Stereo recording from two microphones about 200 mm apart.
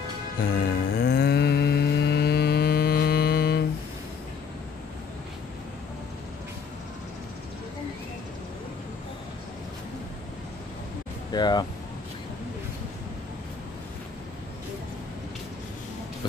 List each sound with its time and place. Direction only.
0.4 s music: 45° left (ahead or behind)
11.3 s speech: 20° left (ahead or behind)